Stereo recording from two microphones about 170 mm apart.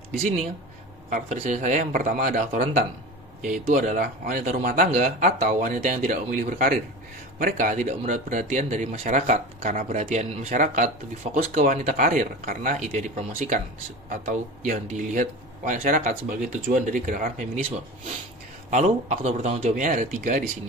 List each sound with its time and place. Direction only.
1.1 s a man's voice: 45° right (ahead or behind)
18.7 s a man's voice: 45° right (ahead or behind)